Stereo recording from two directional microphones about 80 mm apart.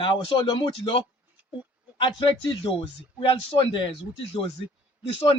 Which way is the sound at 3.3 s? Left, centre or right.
Left.